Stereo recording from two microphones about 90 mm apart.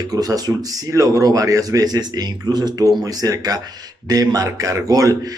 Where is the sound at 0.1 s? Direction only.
45° right (ahead or behind).